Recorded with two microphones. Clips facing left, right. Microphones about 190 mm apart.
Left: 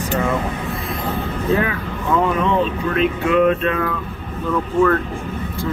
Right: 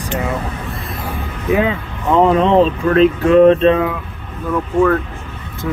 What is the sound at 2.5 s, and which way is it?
Speech, 35° right (ahead or behind).